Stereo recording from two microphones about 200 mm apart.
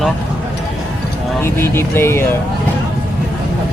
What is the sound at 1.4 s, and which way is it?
Speech, 10° left (ahead or behind).